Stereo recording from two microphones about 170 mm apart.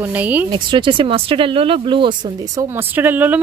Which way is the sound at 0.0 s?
10° right (ahead or behind).